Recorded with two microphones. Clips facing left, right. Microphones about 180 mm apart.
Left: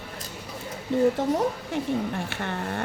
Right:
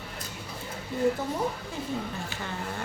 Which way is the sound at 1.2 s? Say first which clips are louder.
Left 7 dB; 90° left.